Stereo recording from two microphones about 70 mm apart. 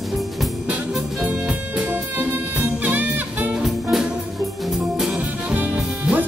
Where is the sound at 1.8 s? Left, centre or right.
Right.